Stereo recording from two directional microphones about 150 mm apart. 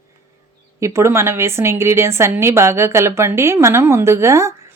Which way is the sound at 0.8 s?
20° right (ahead or behind).